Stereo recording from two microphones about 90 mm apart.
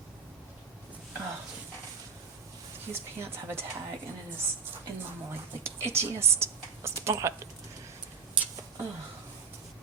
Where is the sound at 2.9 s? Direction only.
25° right (ahead or behind).